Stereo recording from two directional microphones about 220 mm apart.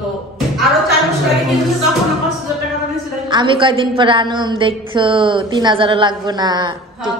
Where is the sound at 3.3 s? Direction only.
20° right (ahead or behind).